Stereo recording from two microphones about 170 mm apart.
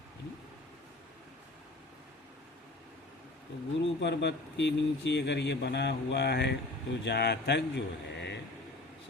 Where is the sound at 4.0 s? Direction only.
90° left.